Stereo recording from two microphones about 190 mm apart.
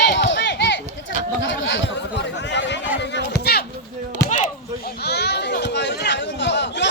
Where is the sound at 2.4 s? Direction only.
65° left (ahead or behind).